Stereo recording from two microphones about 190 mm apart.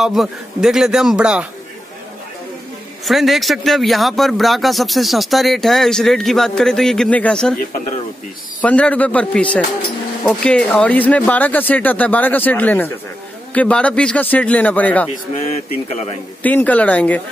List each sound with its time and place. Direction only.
0.0 s speech: centre (ahead or behind)
3.1 s speech: centre (ahead or behind)
8.6 s speech: 5° left (ahead or behind)
15.3 s speech: 35° left (ahead or behind)
16.4 s speech: 10° left (ahead or behind)